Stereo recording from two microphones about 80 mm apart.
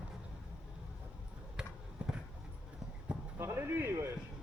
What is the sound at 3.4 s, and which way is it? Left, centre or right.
Speech, right.